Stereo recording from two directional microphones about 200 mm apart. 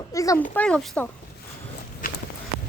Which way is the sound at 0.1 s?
15° left (ahead or behind).